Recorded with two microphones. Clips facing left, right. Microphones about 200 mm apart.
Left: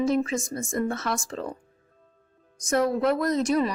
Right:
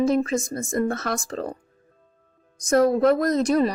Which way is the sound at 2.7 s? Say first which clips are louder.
Right 5 dB; 40° right (ahead or behind).